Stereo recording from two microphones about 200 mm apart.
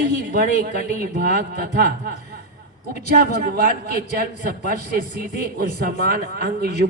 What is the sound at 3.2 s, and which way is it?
Speech, 50° right (ahead or behind).